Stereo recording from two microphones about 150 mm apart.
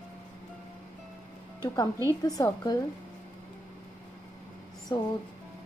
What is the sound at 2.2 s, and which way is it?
Speech, 25° left (ahead or behind).